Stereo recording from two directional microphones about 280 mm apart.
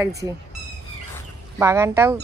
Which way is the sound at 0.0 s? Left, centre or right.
Centre.